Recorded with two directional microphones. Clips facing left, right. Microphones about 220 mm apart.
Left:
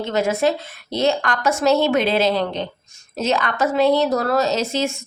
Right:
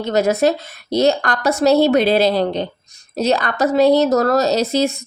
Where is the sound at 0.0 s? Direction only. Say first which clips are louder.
Right 4 dB; 40° right (ahead or behind).